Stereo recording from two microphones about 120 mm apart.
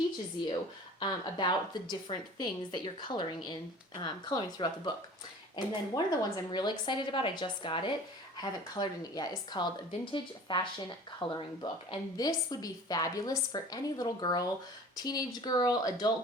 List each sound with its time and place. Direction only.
0.9 s a woman's voice: 40° left (ahead or behind)
12.1 s a woman's voice: 30° left (ahead or behind)